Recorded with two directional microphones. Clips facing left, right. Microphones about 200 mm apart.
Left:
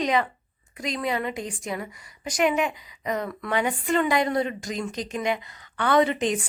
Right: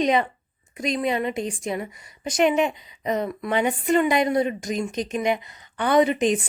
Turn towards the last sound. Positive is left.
turn(degrees=-20)  # may be behind; listen again after turning